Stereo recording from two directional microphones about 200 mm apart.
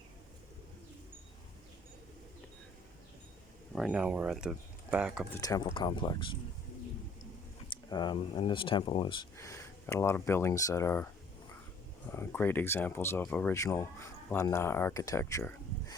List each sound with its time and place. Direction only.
3.7 s speech: 5° right (ahead or behind)
5.3 s speech: 15° left (ahead or behind)
7.7 s speech: 25° left (ahead or behind)
9.4 s speech: 15° left (ahead or behind)
12.1 s speech: 10° left (ahead or behind)